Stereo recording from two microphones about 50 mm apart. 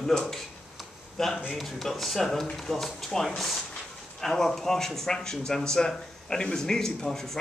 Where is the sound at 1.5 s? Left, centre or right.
Centre.